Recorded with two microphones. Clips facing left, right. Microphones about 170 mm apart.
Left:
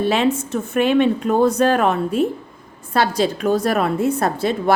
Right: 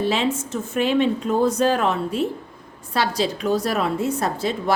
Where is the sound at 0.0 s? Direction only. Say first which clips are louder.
Left 4 dB; 60° left (ahead or behind).